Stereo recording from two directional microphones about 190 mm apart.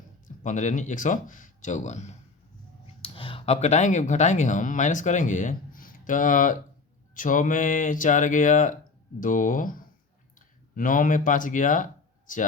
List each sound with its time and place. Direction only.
0.3 s speech: 40° left (ahead or behind)